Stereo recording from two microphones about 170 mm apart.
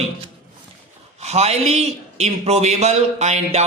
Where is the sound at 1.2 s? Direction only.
40° right (ahead or behind).